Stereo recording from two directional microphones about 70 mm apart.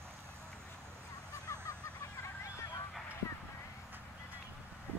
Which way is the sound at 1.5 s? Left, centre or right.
Left.